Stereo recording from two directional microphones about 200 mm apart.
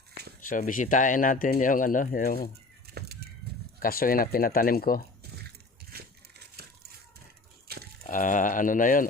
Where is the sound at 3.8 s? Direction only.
45° left (ahead or behind).